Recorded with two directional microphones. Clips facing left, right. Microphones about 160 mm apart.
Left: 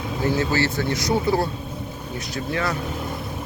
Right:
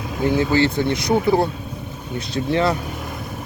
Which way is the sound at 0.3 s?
20° right (ahead or behind).